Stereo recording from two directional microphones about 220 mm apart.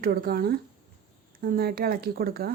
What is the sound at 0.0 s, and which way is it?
Speech, 45° right (ahead or behind).